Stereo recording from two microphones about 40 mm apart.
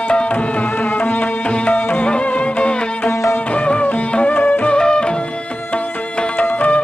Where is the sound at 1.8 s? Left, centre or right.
Left.